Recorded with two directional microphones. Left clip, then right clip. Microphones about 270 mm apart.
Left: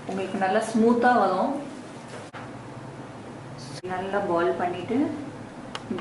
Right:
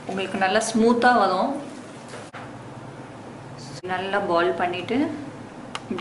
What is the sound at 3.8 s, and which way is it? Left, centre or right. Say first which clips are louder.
A woman's voice: right 3 dB; centre.